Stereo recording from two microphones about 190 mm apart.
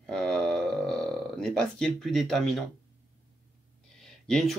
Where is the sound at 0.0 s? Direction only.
5° left (ahead or behind).